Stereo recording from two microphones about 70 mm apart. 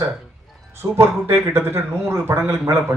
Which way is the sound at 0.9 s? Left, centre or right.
Right.